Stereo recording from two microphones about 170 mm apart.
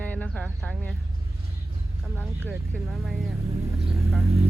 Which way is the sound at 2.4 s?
15° right (ahead or behind).